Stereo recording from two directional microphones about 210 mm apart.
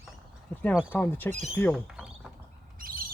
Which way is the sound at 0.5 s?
5° left (ahead or behind).